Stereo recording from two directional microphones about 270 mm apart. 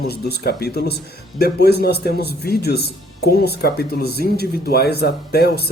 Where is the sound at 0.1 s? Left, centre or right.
Left.